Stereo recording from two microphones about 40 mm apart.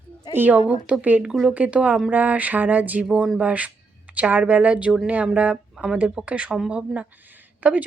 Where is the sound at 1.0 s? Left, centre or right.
Right.